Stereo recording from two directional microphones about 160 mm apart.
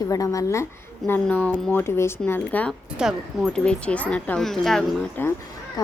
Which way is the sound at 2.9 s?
Centre (ahead or behind).